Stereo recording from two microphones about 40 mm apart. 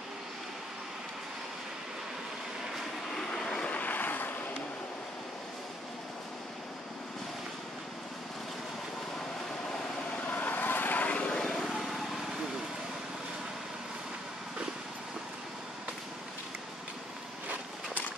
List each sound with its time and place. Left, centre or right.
3.2 s vehicle: centre
3.7 s vehicle: left
10.2 s vehicle: left
11.1 s vehicle: left
11.3 s vehicle: centre